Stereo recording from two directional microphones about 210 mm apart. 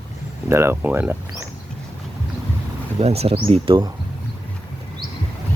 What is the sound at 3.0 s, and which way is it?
Speech, 30° right (ahead or behind).